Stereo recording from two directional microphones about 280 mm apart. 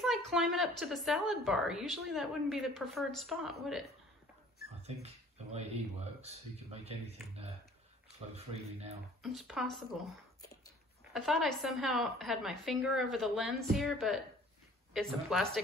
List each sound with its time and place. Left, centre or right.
0.0 s a woman's voice: centre
5.0 s speech: right
8.4 s speech: right
9.2 s a woman's voice: centre
11.1 s a woman's voice: centre